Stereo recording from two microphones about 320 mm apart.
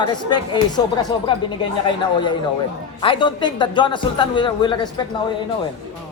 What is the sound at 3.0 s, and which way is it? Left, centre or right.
Speech, centre.